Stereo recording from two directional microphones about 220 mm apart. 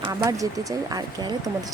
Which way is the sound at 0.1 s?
15° right (ahead or behind).